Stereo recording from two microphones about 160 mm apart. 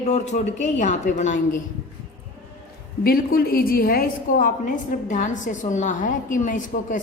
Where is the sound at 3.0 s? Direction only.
70° left (ahead or behind).